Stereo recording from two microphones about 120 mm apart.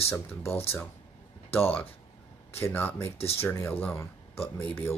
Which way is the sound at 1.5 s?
20° left (ahead or behind).